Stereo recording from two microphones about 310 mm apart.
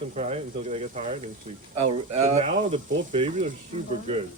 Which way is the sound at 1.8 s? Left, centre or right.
Right.